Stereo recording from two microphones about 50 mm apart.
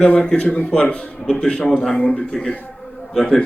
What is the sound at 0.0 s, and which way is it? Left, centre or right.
A man's voice, centre.